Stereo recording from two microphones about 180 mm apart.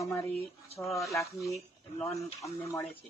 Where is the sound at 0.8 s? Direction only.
Centre (ahead or behind).